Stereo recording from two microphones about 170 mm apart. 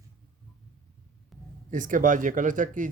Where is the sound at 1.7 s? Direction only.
50° right (ahead or behind).